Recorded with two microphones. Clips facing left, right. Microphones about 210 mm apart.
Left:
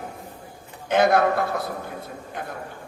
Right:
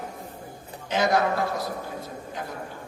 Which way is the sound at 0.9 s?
55° left (ahead or behind).